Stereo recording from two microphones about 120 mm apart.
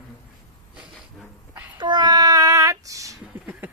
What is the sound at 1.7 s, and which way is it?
Child singing, 40° right (ahead or behind).